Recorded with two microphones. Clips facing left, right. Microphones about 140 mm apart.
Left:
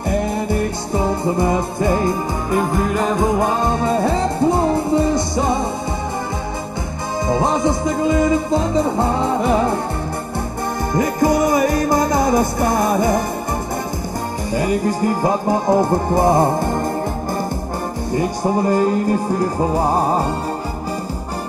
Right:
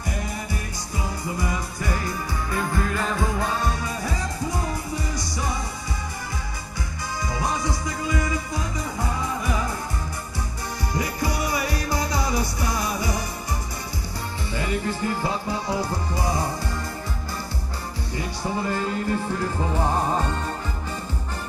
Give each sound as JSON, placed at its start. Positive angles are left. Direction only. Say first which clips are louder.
{"t": 0.1, "sound": "music", "louder": "left 13 dB", "side_deg": 60}
{"t": 1.4, "sound": "music", "louder": "left 11 dB", "side_deg": 25}
{"t": 3.9, "sound": "music", "louder": "left 12 dB", "side_deg": 60}
{"t": 7.2, "sound": "music", "louder": "left 10 dB", "side_deg": 25}
{"t": 8.8, "sound": "music", "louder": "left 10 dB", "side_deg": 60}
{"t": 10.9, "sound": "music", "louder": "left 11 dB", "side_deg": 50}
{"t": 14.5, "sound": "music", "louder": "left 9 dB", "side_deg": 40}
{"t": 18.1, "sound": "music", "louder": "left 10 dB", "side_deg": 45}